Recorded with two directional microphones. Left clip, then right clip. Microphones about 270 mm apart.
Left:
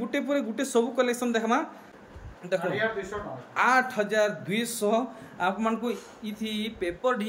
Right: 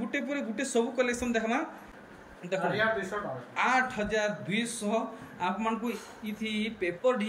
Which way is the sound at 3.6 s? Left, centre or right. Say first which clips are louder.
Left 4 dB; centre.